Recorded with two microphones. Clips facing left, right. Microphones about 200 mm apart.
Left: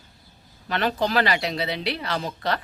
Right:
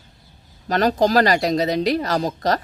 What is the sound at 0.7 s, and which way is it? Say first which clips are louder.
Speech: right 6 dB; 40° right (ahead or behind).